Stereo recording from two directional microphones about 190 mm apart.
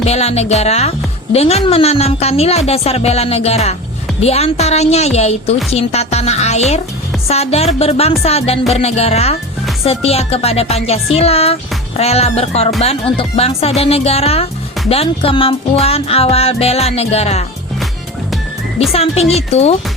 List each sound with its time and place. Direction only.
0.0 s a woman's voice: 35° left (ahead or behind)
18.9 s a woman's voice: 30° left (ahead or behind)